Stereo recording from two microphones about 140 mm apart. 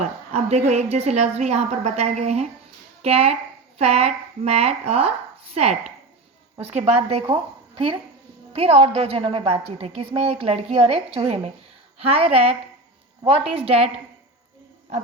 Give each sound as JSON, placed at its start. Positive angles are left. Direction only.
{"t": 0.0, "sound": "a woman's voice", "side_deg": -50}
{"t": 6.6, "sound": "a woman's voice", "side_deg": -45}